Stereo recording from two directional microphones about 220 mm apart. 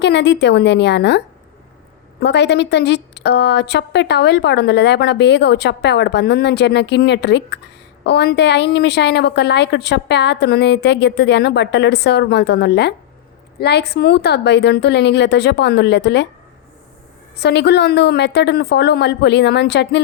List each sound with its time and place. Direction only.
0.0 s a woman's voice: 50° left (ahead or behind)
2.2 s a woman's voice: 50° left (ahead or behind)
17.4 s a woman's voice: 50° left (ahead or behind)